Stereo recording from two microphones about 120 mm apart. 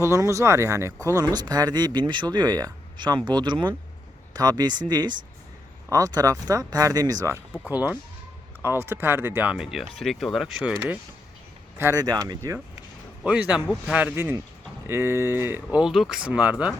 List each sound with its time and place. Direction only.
0.0 s speech: 25° right (ahead or behind)
7.7 s speech: 15° right (ahead or behind)
11.8 s speech: 20° right (ahead or behind)
12.0 s speech: 35° right (ahead or behind)
13.2 s speech: 10° right (ahead or behind)
15.8 s speech: 5° right (ahead or behind)